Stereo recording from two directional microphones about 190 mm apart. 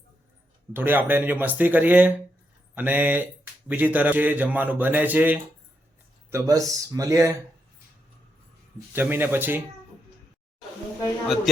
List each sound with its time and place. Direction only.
0.7 s a man's voice: 10° right (ahead or behind)
8.9 s a man's voice: 10° right (ahead or behind)
11.5 s a man's voice: centre (ahead or behind)